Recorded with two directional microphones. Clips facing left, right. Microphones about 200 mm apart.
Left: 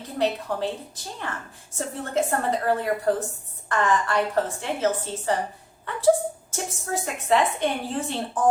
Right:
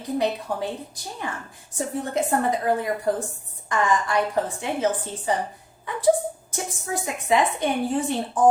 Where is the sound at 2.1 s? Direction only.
15° right (ahead or behind).